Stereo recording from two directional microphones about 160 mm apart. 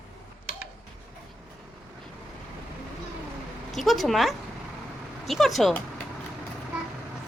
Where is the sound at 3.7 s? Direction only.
Centre (ahead or behind).